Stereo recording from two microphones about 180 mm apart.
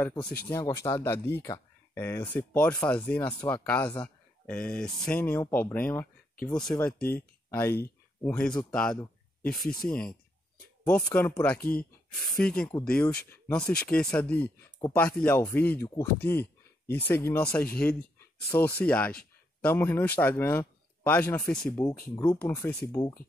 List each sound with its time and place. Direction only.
0.0 s speech: 20° left (ahead or behind)
3.8 s speech: 25° left (ahead or behind)
4.5 s speech: 10° left (ahead or behind)
11.1 s speech: 10° left (ahead or behind)